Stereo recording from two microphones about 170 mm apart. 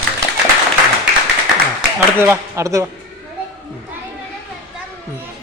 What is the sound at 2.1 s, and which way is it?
Speech, 15° right (ahead or behind).